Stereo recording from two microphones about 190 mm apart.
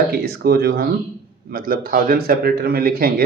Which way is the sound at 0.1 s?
55° right (ahead or behind).